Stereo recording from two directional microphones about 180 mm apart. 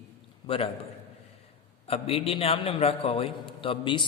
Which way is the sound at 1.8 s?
30° left (ahead or behind).